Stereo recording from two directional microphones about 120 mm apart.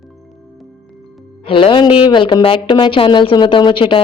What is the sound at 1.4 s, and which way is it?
A woman's voice, 45° left (ahead or behind).